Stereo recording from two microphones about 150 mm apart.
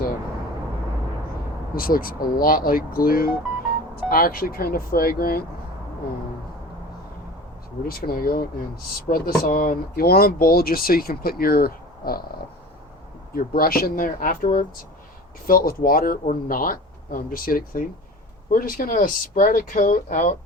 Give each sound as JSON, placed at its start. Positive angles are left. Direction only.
{"t": 1.7, "sound": "speech", "side_deg": 75}
{"t": 7.9, "sound": "speech", "side_deg": 85}
{"t": 13.3, "sound": "speech", "side_deg": 75}